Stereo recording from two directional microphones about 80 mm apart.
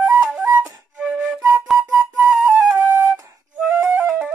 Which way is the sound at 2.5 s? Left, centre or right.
Right.